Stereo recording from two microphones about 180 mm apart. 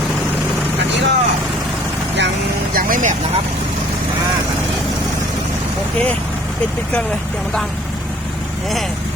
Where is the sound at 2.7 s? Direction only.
50° right (ahead or behind).